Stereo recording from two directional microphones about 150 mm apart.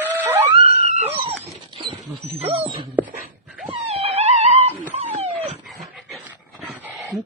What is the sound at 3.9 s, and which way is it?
Wail, 45° right (ahead or behind).